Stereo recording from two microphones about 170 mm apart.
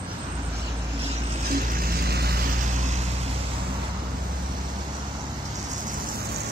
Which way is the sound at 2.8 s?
40° right (ahead or behind).